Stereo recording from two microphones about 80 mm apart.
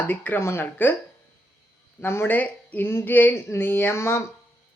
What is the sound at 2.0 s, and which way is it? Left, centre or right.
Speech, left.